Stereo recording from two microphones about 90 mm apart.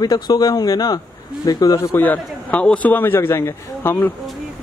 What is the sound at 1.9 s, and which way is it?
A man's voice, 20° left (ahead or behind).